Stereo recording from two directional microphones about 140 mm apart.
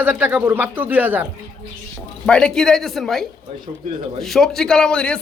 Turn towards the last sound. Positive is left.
turn(degrees=5)  # may be behind; listen again after turning